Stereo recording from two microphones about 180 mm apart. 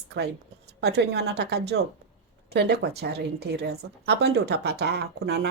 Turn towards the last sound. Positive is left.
turn(degrees=-60)  # may be behind; listen again after turning